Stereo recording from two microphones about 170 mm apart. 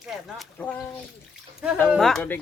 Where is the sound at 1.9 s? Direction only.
Centre (ahead or behind).